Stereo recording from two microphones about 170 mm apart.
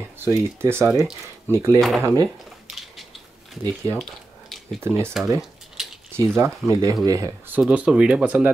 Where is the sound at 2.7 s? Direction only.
Centre (ahead or behind).